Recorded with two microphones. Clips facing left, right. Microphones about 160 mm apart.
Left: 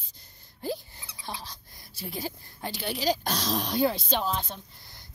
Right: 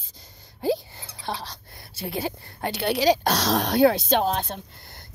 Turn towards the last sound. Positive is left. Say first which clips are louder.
# right 7 dB
turn(degrees=-70)  # may be behind; listen again after turning